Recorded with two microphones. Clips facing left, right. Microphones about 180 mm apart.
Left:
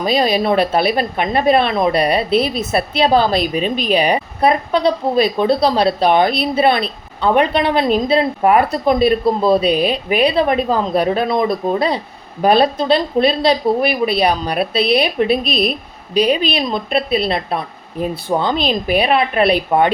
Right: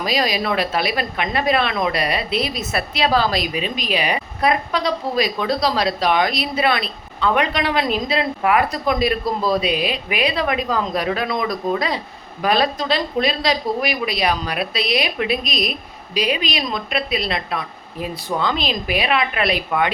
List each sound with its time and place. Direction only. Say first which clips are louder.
0.0 s a woman's voice: left 5 dB; 30° left (ahead or behind)